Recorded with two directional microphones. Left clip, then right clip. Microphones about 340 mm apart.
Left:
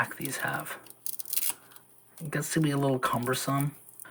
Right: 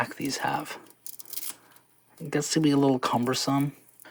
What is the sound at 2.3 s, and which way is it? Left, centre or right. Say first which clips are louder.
Speech: right 5 dB; centre.